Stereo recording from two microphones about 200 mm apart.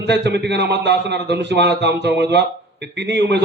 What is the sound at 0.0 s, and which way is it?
A man's voice, 60° right (ahead or behind).